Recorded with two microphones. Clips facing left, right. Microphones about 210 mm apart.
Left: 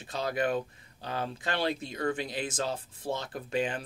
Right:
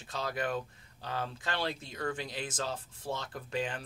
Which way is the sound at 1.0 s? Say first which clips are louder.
Left 3 dB; 15° left (ahead or behind).